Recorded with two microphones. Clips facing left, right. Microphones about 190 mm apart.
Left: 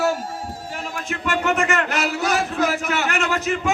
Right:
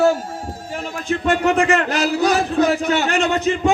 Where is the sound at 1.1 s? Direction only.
35° right (ahead or behind).